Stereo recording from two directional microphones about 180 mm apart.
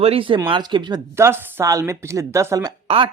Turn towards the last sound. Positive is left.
turn(degrees=-30)  # may be behind; listen again after turning